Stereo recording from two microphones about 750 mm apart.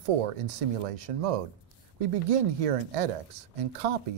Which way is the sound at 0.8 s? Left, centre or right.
Right.